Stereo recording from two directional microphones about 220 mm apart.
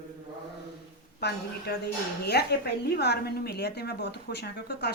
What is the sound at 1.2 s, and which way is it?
A woman's voice, 50° left (ahead or behind).